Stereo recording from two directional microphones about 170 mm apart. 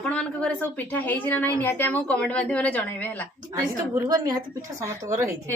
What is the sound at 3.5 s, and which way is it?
A woman's voice, 20° right (ahead or behind).